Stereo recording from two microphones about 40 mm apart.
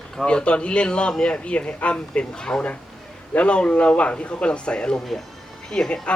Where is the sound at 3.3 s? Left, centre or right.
Left.